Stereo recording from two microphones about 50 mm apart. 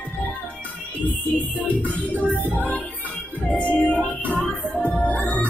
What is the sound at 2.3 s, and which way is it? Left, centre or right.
Music, left.